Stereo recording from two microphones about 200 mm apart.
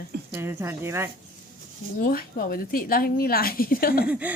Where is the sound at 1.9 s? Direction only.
45° left (ahead or behind).